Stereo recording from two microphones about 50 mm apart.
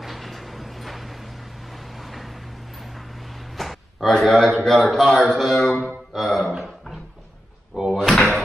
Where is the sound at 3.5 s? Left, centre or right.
Centre.